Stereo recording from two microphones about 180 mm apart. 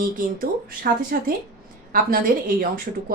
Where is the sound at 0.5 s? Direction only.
50° right (ahead or behind).